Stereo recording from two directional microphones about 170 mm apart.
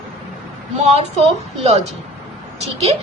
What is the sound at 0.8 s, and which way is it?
Speech, 40° right (ahead or behind).